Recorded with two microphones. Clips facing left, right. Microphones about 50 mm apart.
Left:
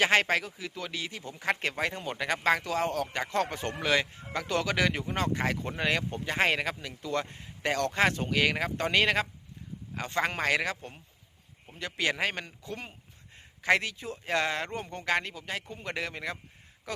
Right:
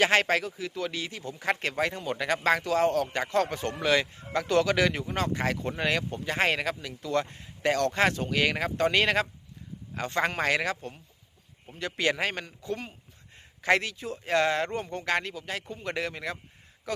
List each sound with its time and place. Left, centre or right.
0.0 s speech: centre
1.2 s speech: centre
3.4 s speech: centre
3.8 s speech: centre
12.5 s speech: centre